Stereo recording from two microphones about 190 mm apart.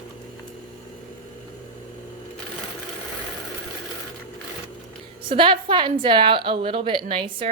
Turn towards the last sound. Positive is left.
turn(degrees=-25)  # may be behind; listen again after turning